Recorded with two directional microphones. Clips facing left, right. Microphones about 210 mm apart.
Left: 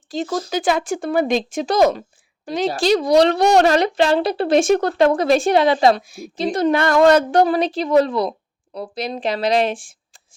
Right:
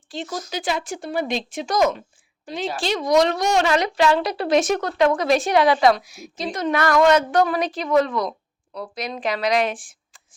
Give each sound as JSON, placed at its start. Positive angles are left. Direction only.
{"t": 0.1, "sound": "speech", "side_deg": 40}
{"t": 1.7, "sound": "a woman's voice", "side_deg": 35}